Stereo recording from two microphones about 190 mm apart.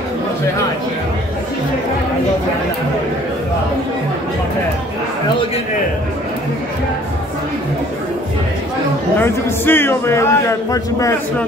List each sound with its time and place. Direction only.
9.2 s a man's voice: 10° left (ahead or behind)